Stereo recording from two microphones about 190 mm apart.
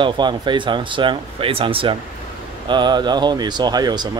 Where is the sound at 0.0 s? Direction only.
25° right (ahead or behind).